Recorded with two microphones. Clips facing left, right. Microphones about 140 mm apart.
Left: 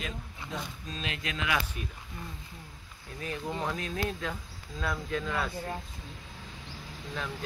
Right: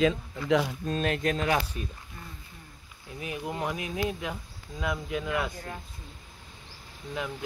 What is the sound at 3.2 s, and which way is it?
Speech, 15° right (ahead or behind).